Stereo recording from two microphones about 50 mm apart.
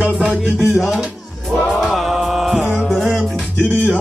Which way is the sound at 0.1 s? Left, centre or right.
Right.